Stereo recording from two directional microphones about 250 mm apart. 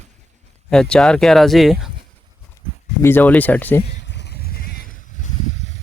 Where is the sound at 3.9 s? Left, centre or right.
Left.